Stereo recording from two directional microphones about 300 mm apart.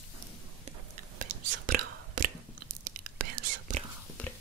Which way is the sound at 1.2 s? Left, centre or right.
Right.